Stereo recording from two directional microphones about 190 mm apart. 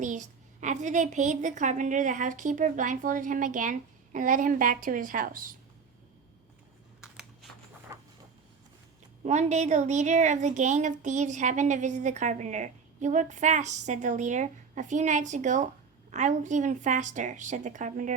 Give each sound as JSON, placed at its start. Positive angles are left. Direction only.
{"t": 0.0, "sound": "a woman's voice", "side_deg": -40}
{"t": 7.0, "sound": "computer keyboard", "side_deg": -5}
{"t": 7.9, "sound": "a sound", "side_deg": -15}
{"t": 9.2, "sound": "a woman's voice", "side_deg": -35}